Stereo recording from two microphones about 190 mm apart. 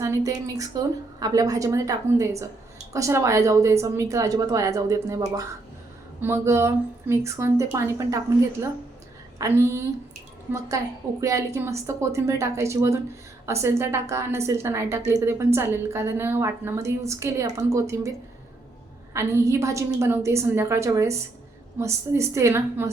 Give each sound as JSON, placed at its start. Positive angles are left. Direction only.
{"t": 0.0, "sound": "a woman's voice", "side_deg": -15}
{"t": 9.4, "sound": "a woman's voice", "side_deg": -15}
{"t": 19.1, "sound": "a woman's voice", "side_deg": -15}